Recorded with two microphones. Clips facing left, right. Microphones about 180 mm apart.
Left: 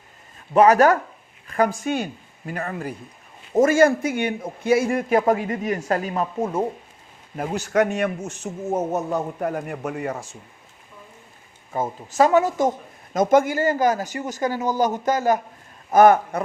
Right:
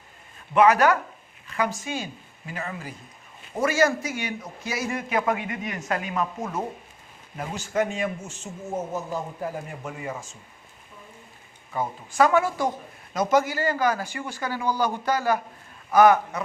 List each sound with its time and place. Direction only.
0.5 s a man's voice: 40° left (ahead or behind)
7.3 s speech: 65° left (ahead or behind)
11.7 s speech: 40° left (ahead or behind)
12.2 s speech: 20° left (ahead or behind)
13.1 s a man's voice: 50° left (ahead or behind)